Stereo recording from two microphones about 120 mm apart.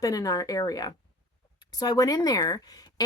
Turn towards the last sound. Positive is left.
turn(degrees=35)  # may be behind; listen again after turning